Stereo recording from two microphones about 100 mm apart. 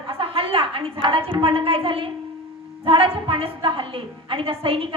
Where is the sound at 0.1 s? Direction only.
65° right (ahead or behind).